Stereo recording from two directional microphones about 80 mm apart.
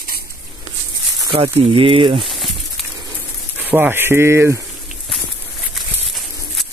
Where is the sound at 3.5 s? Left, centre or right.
Right.